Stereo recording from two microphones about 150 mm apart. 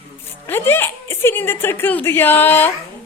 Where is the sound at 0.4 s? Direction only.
15° left (ahead or behind).